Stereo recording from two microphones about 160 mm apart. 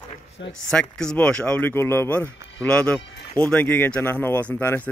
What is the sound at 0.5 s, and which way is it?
Speech, 5° left (ahead or behind).